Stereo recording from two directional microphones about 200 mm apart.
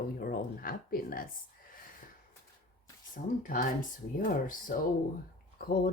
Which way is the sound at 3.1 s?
40° left (ahead or behind).